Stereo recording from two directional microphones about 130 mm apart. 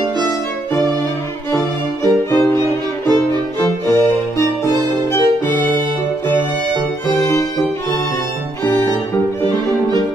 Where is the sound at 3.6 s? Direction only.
20° left (ahead or behind).